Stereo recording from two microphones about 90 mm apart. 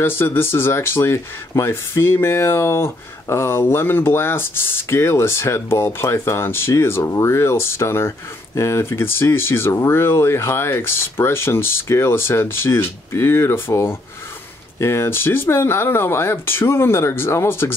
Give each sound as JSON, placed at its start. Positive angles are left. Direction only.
{"t": 0.0, "sound": "speech", "side_deg": 25}